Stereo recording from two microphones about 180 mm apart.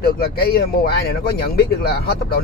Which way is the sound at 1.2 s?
60° left (ahead or behind).